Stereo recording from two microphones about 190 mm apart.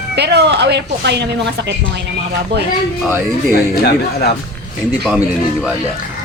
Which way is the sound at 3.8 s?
55° left (ahead or behind).